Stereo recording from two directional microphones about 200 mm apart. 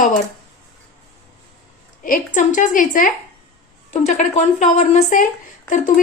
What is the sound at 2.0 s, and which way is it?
A woman's voice, 40° left (ahead or behind).